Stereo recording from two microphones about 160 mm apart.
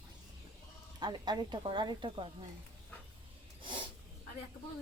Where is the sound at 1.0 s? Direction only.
25° right (ahead or behind).